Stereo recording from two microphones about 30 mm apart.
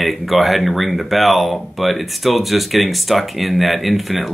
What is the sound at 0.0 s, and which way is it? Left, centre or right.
Speech, centre.